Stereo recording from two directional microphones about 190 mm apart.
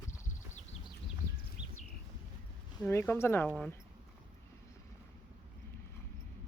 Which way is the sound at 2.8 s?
10° left (ahead or behind).